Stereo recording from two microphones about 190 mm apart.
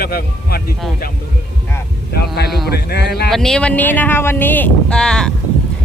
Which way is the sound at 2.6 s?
55° left (ahead or behind).